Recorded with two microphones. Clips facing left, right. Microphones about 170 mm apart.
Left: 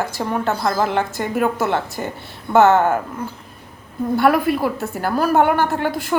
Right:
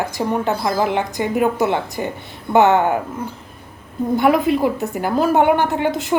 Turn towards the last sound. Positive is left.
turn(degrees=-20)  # may be behind; listen again after turning